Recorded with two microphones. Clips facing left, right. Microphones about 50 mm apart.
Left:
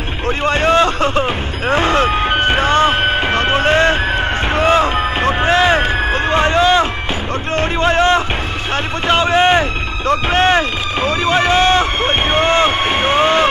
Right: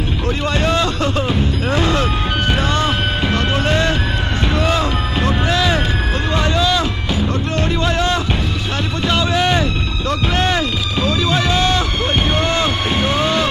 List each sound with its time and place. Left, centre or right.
0.5 s speech: left